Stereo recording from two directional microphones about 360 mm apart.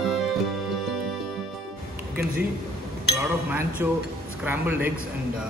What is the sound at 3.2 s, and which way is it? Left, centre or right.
Speech, centre.